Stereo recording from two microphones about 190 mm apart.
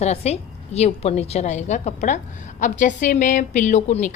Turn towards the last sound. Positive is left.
turn(degrees=40)  # may be behind; listen again after turning